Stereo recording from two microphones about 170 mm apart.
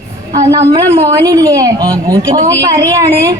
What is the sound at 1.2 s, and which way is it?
A man's voice, 20° right (ahead or behind).